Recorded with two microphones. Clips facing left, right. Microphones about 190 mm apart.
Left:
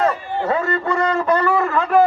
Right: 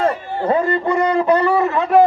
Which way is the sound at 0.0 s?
30° right (ahead or behind).